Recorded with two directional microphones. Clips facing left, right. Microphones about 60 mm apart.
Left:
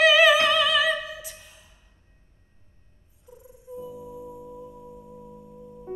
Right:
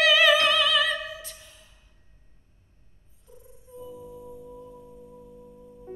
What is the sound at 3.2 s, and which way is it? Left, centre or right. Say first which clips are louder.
Cat: left 4 dB; centre.